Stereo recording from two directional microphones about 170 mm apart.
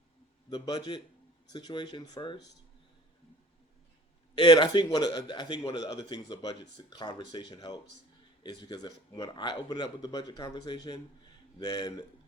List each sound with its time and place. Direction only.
0.5 s speech: 25° left (ahead or behind)
4.4 s speech: 25° left (ahead or behind)